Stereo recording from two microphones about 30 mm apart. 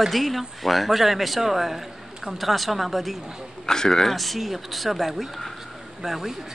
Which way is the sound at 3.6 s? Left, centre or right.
Centre.